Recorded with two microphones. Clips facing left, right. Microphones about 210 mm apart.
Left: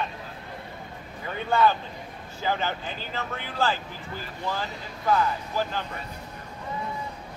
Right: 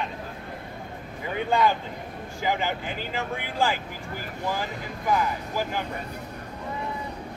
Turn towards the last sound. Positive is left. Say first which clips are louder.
# even
turn(degrees=-10)  # may be behind; listen again after turning